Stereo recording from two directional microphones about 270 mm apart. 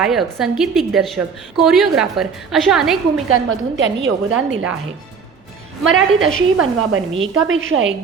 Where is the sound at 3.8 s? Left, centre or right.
Right.